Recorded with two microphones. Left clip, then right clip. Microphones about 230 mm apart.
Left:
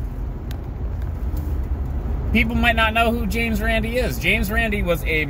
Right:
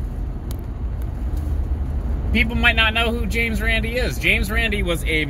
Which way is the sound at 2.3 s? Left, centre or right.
Centre.